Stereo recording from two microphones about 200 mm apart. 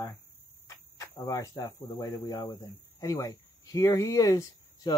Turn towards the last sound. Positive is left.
turn(degrees=20)  # may be behind; listen again after turning